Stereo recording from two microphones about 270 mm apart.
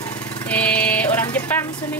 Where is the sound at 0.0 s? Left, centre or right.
Centre.